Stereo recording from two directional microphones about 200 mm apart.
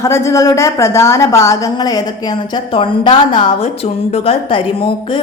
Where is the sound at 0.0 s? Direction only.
15° left (ahead or behind).